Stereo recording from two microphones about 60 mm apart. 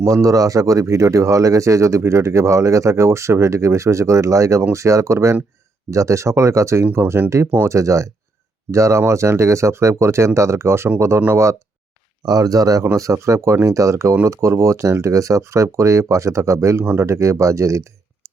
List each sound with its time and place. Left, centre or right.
0.0 s speech: right
12.2 s speech: right
12.8 s speech: right